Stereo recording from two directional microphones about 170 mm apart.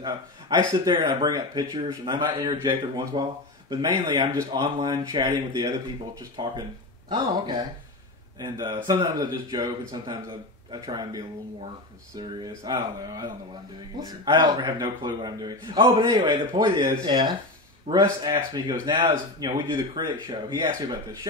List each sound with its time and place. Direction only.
0.0 s a man's voice: 25° right (ahead or behind)